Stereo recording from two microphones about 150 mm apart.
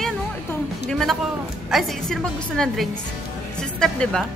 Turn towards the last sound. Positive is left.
turn(degrees=5)  # may be behind; listen again after turning